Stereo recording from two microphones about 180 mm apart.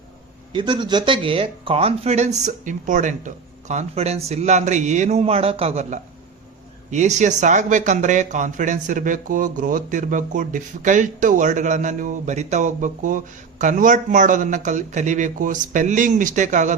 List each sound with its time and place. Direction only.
0.5 s speech: 25° right (ahead or behind); by 16.7 s 45° right (ahead or behind)